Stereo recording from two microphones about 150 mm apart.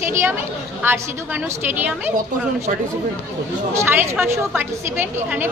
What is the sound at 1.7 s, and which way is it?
Speech, 15° right (ahead or behind).